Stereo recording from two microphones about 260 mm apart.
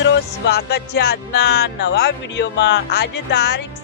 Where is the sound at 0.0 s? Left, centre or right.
Left.